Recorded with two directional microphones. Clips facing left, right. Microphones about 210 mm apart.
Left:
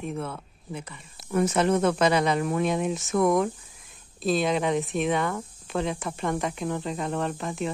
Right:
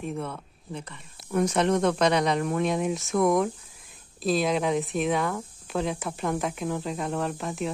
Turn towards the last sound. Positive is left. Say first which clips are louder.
# even
turn(degrees=0)  # may be behind; listen again after turning